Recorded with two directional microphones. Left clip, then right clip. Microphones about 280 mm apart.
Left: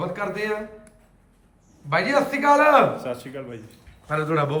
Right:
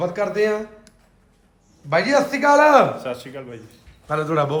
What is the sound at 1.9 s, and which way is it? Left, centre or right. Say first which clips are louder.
A man's voice: right 3 dB; centre.